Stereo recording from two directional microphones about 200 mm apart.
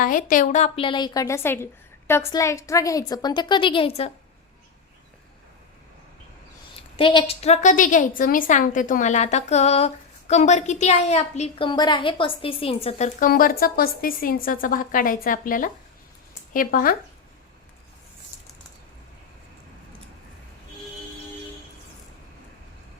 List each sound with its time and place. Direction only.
0.0 s a woman's voice: 45° left (ahead or behind)
7.0 s a woman's voice: 25° left (ahead or behind); by 17.0 s 45° left (ahead or behind)